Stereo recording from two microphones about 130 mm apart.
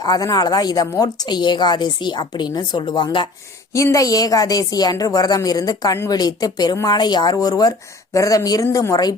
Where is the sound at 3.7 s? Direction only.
25° left (ahead or behind).